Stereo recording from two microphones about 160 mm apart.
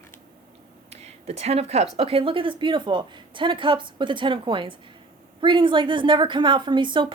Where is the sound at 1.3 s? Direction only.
40° right (ahead or behind).